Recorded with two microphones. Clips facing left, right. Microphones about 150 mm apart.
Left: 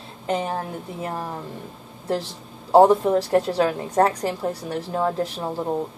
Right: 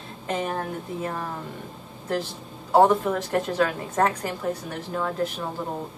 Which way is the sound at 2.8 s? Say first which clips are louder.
Left 3 dB; 30° left (ahead or behind).